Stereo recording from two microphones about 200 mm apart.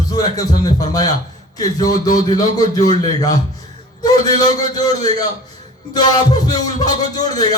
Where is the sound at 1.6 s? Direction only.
20° left (ahead or behind).